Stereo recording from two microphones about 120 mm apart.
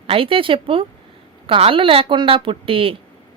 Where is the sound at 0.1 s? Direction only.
50° right (ahead or behind).